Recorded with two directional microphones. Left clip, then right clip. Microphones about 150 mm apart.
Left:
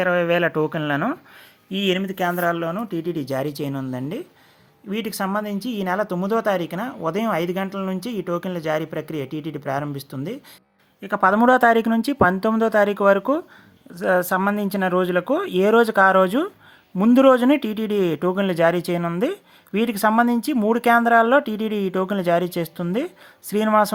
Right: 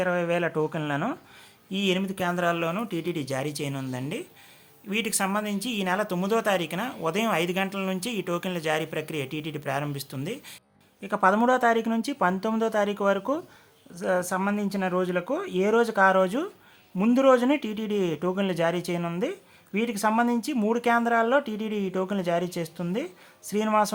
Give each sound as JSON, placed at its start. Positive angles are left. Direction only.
{"t": 0.0, "sound": "speech", "side_deg": 30}
{"t": 2.1, "sound": "speech", "side_deg": 35}
{"t": 2.4, "sound": "speech", "side_deg": 20}
{"t": 19.2, "sound": "speech", "side_deg": 40}